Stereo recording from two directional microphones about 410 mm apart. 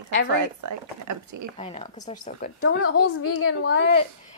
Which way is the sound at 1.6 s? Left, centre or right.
Centre.